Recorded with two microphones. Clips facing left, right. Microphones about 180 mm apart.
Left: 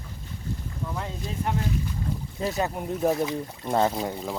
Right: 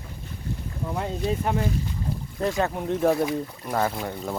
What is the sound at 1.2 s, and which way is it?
Speech, 65° right (ahead or behind).